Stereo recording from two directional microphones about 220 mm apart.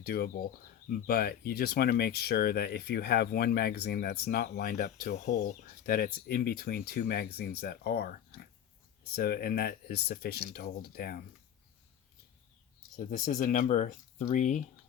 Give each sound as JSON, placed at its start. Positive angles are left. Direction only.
{"t": 0.0, "sound": "speech", "side_deg": 45}
{"t": 13.0, "sound": "speech", "side_deg": 40}